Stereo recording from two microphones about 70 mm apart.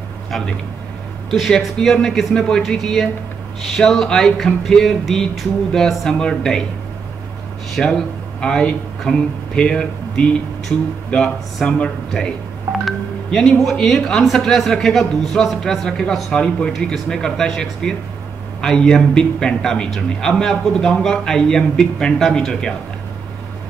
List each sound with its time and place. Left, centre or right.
1.8 s a man's voice: centre
7.7 s a man's voice: centre